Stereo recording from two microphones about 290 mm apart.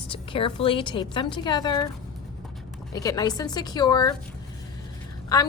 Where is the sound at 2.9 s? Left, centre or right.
Centre.